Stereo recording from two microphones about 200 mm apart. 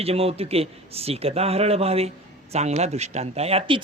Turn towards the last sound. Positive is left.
turn(degrees=-25)  # may be behind; listen again after turning